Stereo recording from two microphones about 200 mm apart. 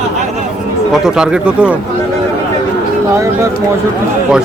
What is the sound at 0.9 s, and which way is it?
Speech, 5° right (ahead or behind).